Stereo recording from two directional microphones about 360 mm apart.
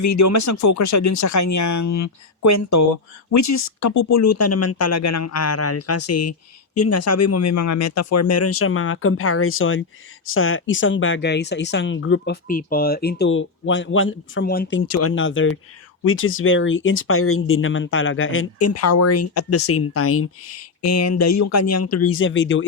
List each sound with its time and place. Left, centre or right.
0.0 s speech: left